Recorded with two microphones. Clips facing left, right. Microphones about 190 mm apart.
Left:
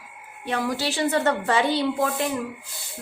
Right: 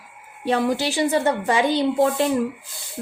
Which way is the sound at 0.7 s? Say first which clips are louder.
Right 3 dB; 15° right (ahead or behind).